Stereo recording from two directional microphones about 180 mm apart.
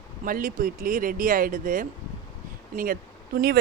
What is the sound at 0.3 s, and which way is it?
Speech, 50° right (ahead or behind).